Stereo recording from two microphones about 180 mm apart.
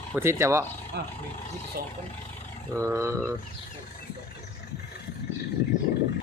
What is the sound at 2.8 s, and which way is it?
Speech, 15° right (ahead or behind).